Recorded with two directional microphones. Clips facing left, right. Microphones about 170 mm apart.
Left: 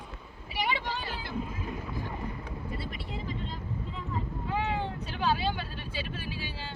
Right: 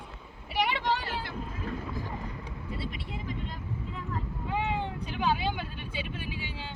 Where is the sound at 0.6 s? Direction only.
70° right (ahead or behind).